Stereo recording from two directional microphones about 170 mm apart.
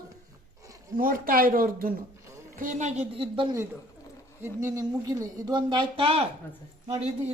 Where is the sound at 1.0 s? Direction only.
55° right (ahead or behind).